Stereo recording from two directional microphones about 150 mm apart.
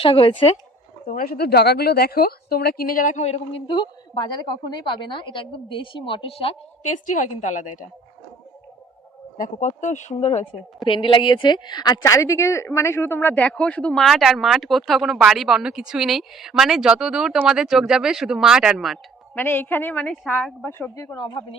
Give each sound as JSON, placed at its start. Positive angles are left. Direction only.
{"t": 0.0, "sound": "a woman's voice", "side_deg": 35}
{"t": 1.0, "sound": "a woman's voice", "side_deg": 70}
{"t": 3.7, "sound": "a woman's voice", "side_deg": 30}
{"t": 6.8, "sound": "a woman's voice", "side_deg": 55}
{"t": 9.4, "sound": "speech", "side_deg": 55}
{"t": 10.8, "sound": "a woman's voice", "side_deg": 35}
{"t": 19.4, "sound": "a woman's voice", "side_deg": 15}